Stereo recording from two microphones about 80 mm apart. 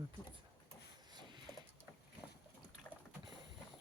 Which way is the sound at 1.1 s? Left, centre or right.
Right.